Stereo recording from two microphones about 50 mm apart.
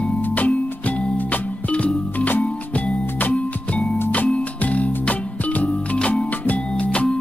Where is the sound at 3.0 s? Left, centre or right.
Left.